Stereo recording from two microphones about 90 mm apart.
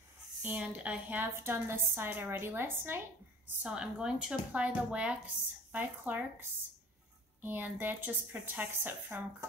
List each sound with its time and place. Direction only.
0.4 s a woman's voice: 15° right (ahead or behind)
3.6 s speech: 10° right (ahead or behind)
7.4 s a woman's voice: 20° right (ahead or behind)